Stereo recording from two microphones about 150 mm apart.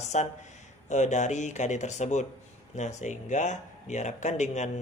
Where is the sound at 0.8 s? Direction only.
50° left (ahead or behind).